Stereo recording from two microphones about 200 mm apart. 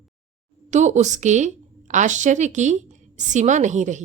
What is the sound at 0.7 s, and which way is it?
A woman's voice, 35° right (ahead or behind).